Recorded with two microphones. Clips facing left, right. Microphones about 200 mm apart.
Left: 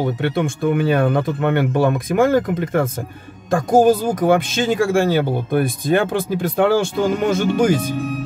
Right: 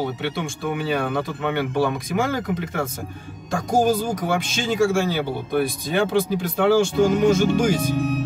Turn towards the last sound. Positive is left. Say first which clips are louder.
# left 3 dB
turn(degrees=55)  # may be behind; listen again after turning